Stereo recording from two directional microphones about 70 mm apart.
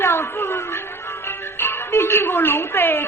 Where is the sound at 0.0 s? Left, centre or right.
Left.